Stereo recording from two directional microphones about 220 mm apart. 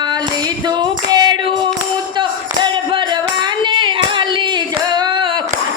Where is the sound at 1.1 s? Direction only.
20° right (ahead or behind).